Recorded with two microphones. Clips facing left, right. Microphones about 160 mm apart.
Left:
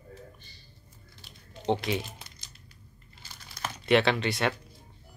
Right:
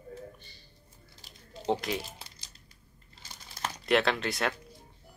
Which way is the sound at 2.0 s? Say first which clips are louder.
Left 1 dB; 35° right (ahead or behind).